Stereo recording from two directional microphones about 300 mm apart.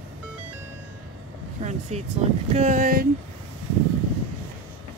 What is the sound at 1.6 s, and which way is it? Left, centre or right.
Boat, right.